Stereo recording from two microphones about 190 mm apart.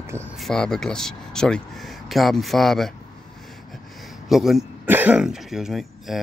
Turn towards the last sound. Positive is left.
turn(degrees=0)  # may be behind; listen again after turning